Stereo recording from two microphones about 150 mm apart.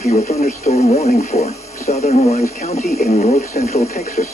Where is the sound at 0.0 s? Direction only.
55° left (ahead or behind).